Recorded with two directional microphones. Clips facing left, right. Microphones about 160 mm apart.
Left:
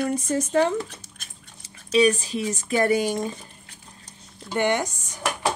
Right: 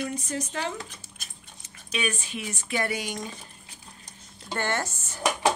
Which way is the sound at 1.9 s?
35° left (ahead or behind).